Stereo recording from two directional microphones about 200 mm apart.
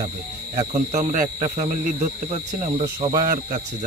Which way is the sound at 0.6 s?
35° right (ahead or behind).